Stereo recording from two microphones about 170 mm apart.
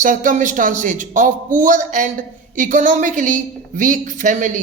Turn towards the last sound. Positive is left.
turn(degrees=-50)  # may be behind; listen again after turning